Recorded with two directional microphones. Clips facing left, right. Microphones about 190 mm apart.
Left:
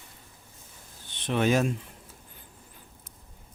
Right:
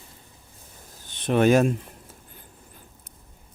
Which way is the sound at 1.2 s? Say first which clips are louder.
Right 6 dB; 50° right (ahead or behind).